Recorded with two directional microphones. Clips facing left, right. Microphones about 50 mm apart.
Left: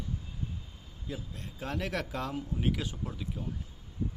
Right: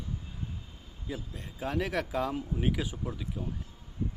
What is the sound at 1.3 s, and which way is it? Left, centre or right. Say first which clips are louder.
Speech: right 6 dB; centre.